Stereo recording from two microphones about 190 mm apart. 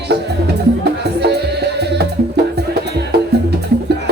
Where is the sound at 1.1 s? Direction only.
60° right (ahead or behind).